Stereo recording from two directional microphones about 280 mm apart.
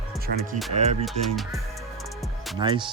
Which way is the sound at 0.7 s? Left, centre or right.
Right.